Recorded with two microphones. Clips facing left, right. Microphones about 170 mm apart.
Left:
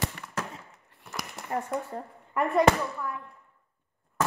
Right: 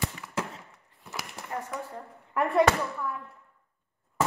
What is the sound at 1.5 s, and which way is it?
Speech, 35° left (ahead or behind).